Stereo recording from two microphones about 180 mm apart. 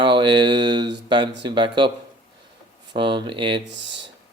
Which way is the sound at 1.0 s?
25° right (ahead or behind).